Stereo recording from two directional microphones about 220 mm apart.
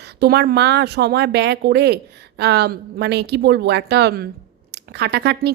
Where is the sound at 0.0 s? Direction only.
50° right (ahead or behind).